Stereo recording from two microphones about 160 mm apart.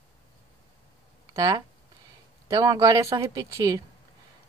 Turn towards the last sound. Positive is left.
turn(degrees=-20)  # may be behind; listen again after turning